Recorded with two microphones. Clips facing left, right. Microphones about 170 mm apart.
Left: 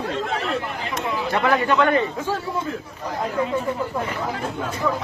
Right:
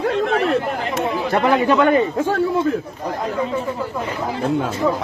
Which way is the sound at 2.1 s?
55° right (ahead or behind).